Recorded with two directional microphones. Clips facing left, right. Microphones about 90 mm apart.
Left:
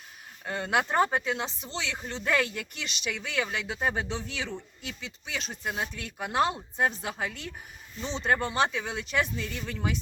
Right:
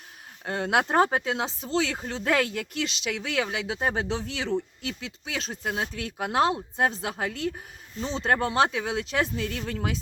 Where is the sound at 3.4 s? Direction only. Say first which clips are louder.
Right 2 dB; 25° right (ahead or behind).